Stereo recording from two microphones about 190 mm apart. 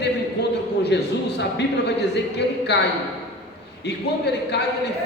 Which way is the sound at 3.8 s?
60° left (ahead or behind).